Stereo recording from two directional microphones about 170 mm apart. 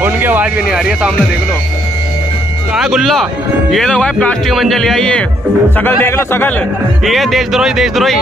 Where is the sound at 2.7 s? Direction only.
Centre (ahead or behind); by 6.5 s 15° left (ahead or behind).